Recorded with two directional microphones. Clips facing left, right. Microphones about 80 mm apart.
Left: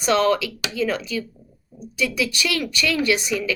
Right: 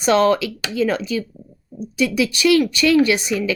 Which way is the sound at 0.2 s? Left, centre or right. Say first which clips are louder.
Right 3 dB; right.